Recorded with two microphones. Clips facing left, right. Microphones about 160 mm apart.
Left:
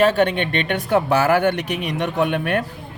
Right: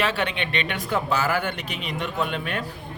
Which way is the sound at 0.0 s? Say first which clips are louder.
Left 9 dB; 45° left (ahead or behind).